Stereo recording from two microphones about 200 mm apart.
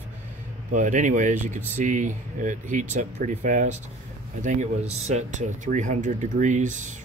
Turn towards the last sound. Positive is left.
turn(degrees=-40)  # may be behind; listen again after turning